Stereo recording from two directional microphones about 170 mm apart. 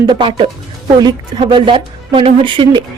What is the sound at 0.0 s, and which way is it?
Speech, 25° right (ahead or behind).